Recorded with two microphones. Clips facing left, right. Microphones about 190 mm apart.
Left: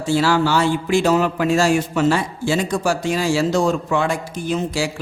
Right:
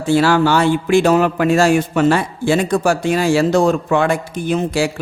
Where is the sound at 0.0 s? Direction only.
60° right (ahead or behind).